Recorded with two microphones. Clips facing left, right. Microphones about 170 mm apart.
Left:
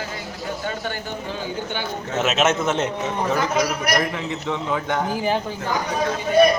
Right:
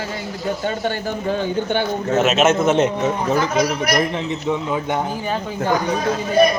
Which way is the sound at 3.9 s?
15° right (ahead or behind).